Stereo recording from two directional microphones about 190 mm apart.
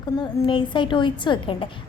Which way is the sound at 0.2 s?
25° left (ahead or behind).